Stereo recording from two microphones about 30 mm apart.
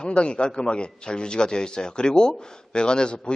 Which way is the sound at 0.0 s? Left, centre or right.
Left.